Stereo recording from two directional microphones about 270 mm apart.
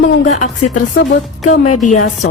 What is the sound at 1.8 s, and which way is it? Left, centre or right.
Speech, left.